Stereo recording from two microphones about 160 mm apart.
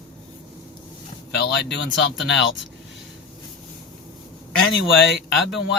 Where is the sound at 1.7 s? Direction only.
90° left.